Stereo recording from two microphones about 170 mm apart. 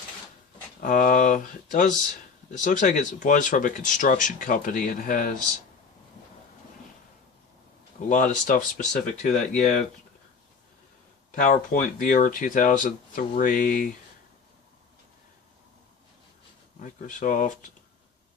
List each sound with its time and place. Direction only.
0.8 s speech: 55° left (ahead or behind)
8.1 s speech: 50° left (ahead or behind)
11.3 s speech: 50° left (ahead or behind)
16.8 s speech: 50° left (ahead or behind)